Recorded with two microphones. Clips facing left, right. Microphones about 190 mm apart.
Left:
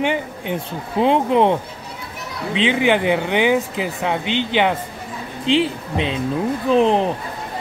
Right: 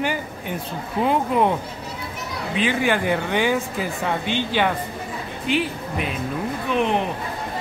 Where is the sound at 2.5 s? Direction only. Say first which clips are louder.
Left 4 dB; 20° left (ahead or behind).